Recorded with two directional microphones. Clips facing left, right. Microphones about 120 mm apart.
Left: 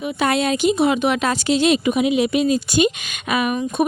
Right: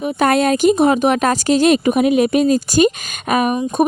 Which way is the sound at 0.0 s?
45° right (ahead or behind).